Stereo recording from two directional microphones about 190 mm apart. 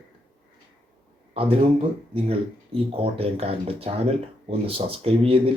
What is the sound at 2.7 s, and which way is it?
Speech, 30° right (ahead or behind).